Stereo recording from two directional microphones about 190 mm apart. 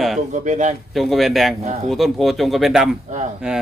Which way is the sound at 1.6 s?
40° right (ahead or behind).